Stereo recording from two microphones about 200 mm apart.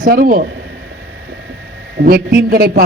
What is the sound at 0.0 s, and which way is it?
Speech, 45° right (ahead or behind).